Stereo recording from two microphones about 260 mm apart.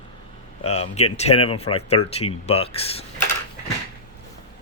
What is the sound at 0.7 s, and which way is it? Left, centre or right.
Speech, left.